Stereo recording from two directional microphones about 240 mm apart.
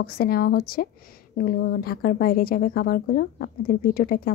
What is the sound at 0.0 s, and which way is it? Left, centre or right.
Speech, left.